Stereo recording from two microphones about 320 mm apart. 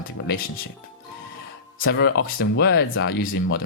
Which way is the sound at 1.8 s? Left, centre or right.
Left.